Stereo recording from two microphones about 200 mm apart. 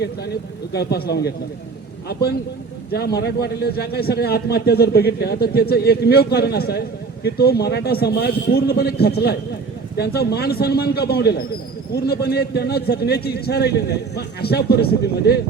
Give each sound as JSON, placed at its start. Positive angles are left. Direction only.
{"t": 0.7, "sound": "a man's voice", "side_deg": 55}
{"t": 2.9, "sound": "a man's voice", "side_deg": 55}